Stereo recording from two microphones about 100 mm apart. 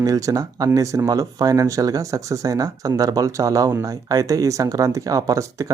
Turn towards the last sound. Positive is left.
turn(degrees=-35)  # may be behind; listen again after turning